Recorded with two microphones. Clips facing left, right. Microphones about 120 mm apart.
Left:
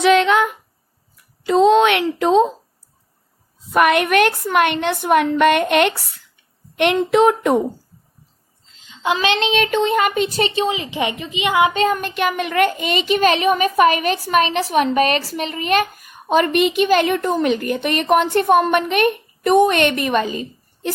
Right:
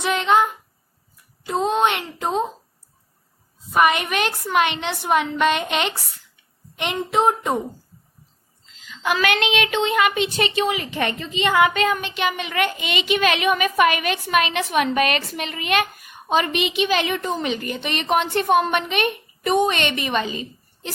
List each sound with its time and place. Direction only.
0.0 s a sound: 70° left (ahead or behind)
1.5 s a woman's voice: 90° left
3.7 s a woman's voice: 65° left (ahead or behind)
6.7 s speech: 70° left (ahead or behind)
8.9 s speech: 25° left (ahead or behind)
11.7 s speech: 35° left (ahead or behind)
11.9 s a child's voice: 50° left (ahead or behind)